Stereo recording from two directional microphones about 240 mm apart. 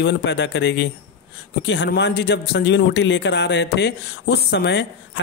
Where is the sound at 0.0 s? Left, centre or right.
Left.